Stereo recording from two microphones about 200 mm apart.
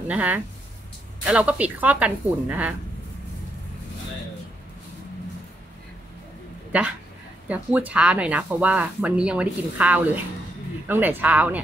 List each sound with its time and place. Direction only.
0.1 s speech: 5° right (ahead or behind)
6.7 s speech: 5° right (ahead or behind)